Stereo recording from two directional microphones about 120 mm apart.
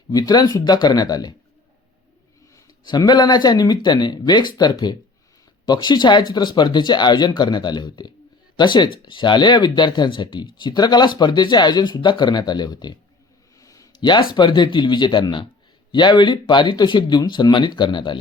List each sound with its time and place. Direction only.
0.1 s speech: 35° left (ahead or behind)
2.8 s speech: 35° left (ahead or behind)
13.6 s a sound: 30° left (ahead or behind)
14.3 s speech: 40° left (ahead or behind)